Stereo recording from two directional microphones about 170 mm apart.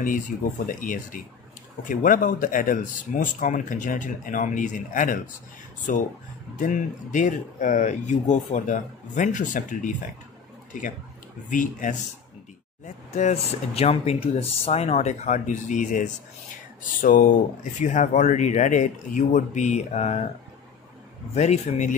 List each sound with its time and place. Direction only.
0.7 s speech: 50° left (ahead or behind)
11.5 s speech: 50° left (ahead or behind)
21.4 s speech: 45° left (ahead or behind)